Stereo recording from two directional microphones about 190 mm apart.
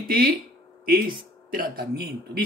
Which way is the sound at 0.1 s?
50° right (ahead or behind).